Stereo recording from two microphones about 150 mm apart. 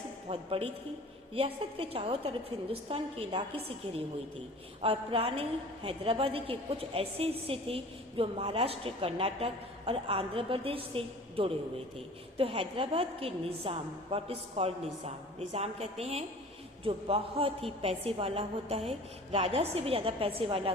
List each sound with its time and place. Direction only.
0.3 s a woman's voice: 40° right (ahead or behind)
4.8 s a woman's voice: 40° right (ahead or behind)